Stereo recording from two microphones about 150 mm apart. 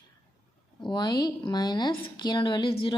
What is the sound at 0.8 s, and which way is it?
A woman's voice, 30° left (ahead or behind).